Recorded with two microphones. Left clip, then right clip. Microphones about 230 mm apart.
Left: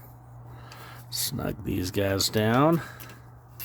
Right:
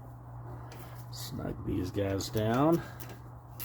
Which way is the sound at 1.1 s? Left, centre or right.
Left.